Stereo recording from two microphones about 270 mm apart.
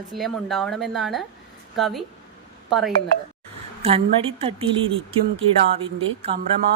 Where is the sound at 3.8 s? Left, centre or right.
Right.